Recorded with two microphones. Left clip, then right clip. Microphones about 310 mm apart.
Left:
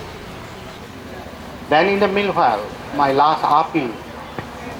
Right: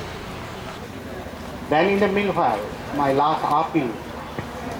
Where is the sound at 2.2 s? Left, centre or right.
Left.